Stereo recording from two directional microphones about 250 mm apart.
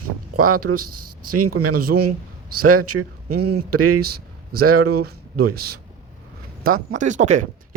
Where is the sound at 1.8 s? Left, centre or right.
Right.